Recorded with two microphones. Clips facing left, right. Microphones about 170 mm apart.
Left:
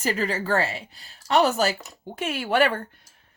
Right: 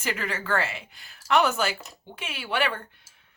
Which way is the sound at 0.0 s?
35° left (ahead or behind).